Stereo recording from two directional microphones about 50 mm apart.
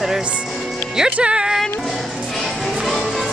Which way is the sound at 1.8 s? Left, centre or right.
Centre.